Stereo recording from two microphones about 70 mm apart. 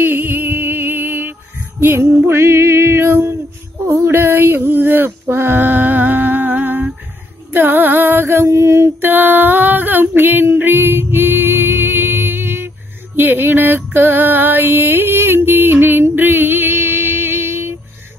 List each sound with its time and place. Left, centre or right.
0.0 s music: right
3.8 s a sound: right
7.5 s music: right
9.0 s female singing: right
13.9 s music: right